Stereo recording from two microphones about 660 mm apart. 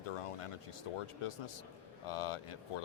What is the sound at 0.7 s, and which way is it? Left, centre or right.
Speech, left.